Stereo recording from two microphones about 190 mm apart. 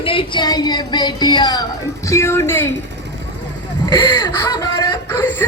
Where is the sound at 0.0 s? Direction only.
30° left (ahead or behind).